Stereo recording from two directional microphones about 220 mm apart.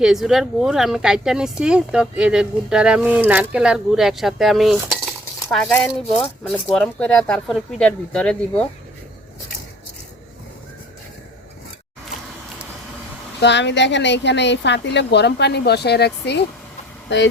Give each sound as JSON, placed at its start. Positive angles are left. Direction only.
{"t": 0.0, "sound": "speech", "side_deg": 0}
{"t": 13.4, "sound": "speech", "side_deg": 50}